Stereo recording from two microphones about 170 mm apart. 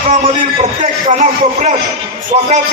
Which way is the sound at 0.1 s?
45° right (ahead or behind).